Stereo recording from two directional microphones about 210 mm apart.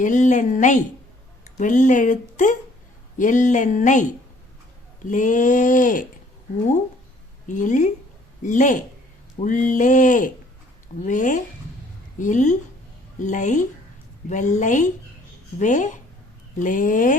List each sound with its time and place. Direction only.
0.0 s speech: 35° left (ahead or behind)
5.0 s speech: 40° left (ahead or behind)
7.4 s speech: 35° left (ahead or behind)